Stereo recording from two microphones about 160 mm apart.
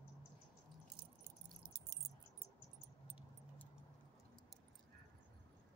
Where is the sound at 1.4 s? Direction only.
25° right (ahead or behind).